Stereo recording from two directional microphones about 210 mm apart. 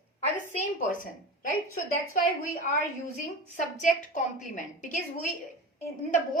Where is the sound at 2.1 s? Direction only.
40° left (ahead or behind).